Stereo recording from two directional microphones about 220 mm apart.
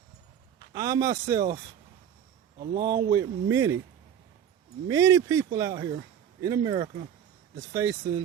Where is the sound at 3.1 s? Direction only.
15° right (ahead or behind).